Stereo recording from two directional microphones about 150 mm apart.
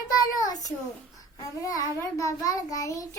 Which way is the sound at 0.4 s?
25° left (ahead or behind).